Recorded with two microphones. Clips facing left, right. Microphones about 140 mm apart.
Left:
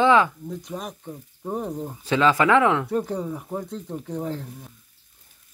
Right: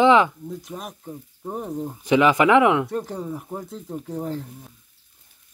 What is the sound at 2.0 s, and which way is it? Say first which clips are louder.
Speech: right 3 dB; 15° right (ahead or behind).